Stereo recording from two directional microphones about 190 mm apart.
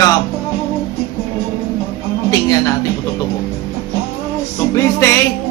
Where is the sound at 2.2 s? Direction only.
20° left (ahead or behind).